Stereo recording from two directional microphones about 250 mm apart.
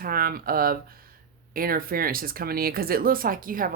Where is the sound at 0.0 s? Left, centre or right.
Right.